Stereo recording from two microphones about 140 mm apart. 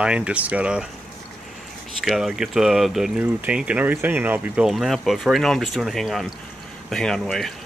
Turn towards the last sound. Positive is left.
turn(degrees=5)  # may be behind; listen again after turning